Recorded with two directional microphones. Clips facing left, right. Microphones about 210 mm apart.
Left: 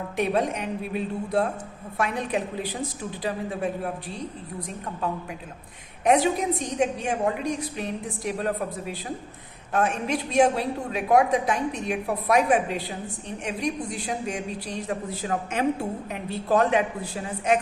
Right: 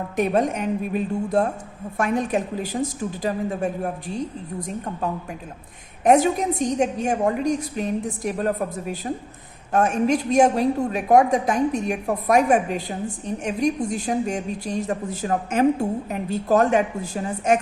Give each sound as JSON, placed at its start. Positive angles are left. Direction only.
{"t": 0.2, "sound": "a woman's voice", "side_deg": -45}
{"t": 6.1, "sound": "a woman's voice", "side_deg": -45}